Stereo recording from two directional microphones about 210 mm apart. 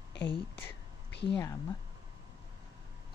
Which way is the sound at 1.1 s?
55° left (ahead or behind).